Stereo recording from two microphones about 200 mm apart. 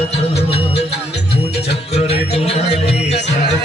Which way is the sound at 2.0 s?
30° left (ahead or behind).